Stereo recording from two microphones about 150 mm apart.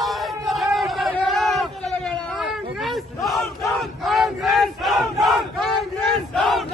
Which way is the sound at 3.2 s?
Centre (ahead or behind).